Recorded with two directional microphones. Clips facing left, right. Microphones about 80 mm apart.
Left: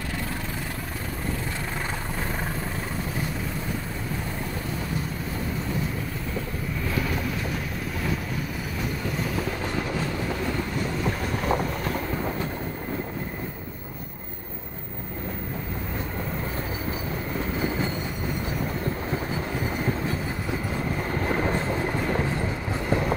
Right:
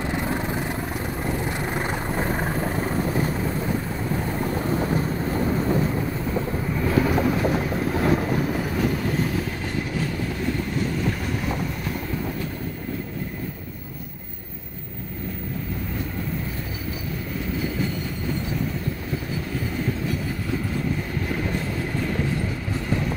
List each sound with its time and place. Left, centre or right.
1.8 s vehicle: right
4.7 s vehicle: right
7.0 s train: right
8.0 s vehicle: right
11.4 s train: left
21.1 s train: left